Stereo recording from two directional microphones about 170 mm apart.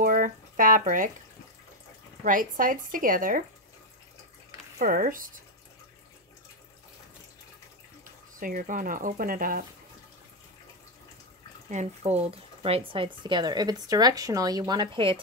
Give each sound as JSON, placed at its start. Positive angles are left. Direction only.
{"t": 0.0, "sound": "a sound", "side_deg": -55}
{"t": 2.2, "sound": "speech", "side_deg": -50}
{"t": 4.7, "sound": "speech", "side_deg": -60}
{"t": 8.0, "sound": "speech", "side_deg": -55}
{"t": 11.7, "sound": "speech", "side_deg": -40}